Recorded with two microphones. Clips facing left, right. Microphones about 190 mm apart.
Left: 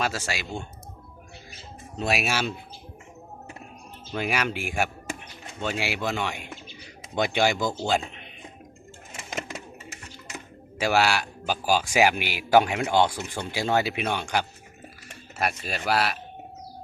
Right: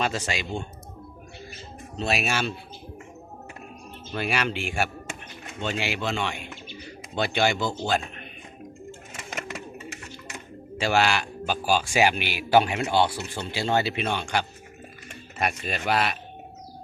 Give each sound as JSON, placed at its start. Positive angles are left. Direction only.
{"t": 0.0, "sound": "speech", "side_deg": 5}
{"t": 2.0, "sound": "speech", "side_deg": 10}
{"t": 4.1, "sound": "speech", "side_deg": 10}
{"t": 10.3, "sound": "speech", "side_deg": 10}